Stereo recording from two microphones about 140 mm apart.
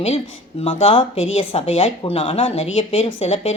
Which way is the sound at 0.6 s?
45° left (ahead or behind).